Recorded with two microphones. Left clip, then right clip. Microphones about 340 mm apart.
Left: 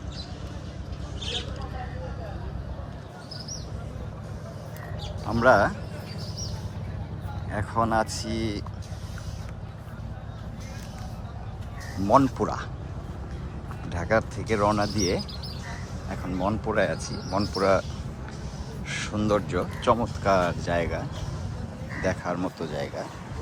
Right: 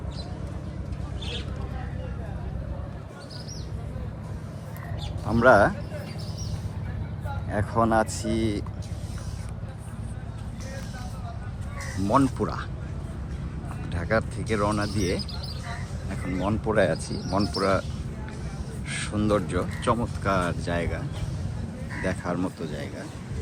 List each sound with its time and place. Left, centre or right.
5.3 s speech: centre
7.5 s speech: centre
12.0 s speech: centre
13.9 s speech: centre
16.0 s speech: centre
18.9 s speech: centre
22.2 s speech: centre
22.6 s speech: centre